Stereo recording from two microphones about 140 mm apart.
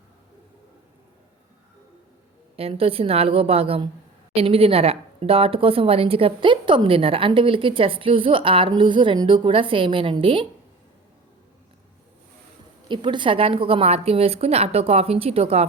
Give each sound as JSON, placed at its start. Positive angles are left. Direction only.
{"t": 2.6, "sound": "a woman's voice", "side_deg": -45}
{"t": 12.9, "sound": "a woman's voice", "side_deg": -35}